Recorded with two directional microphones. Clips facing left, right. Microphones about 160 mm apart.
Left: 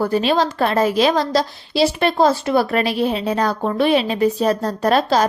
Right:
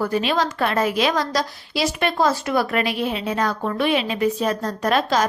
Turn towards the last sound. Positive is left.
turn(degrees=35)  # may be behind; listen again after turning